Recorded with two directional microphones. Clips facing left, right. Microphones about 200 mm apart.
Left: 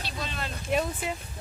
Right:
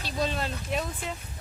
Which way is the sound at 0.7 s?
5° left (ahead or behind).